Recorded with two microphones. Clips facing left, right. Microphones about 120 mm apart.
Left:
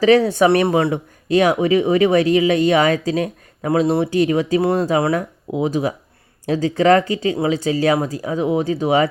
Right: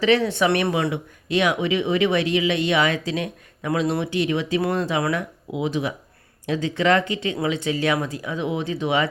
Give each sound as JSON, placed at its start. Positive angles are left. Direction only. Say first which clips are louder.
{"t": 0.0, "sound": "speech", "louder": "left 6 dB", "side_deg": 40}